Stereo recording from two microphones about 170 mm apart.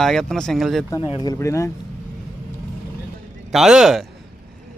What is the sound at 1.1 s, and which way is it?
Speech, 25° left (ahead or behind).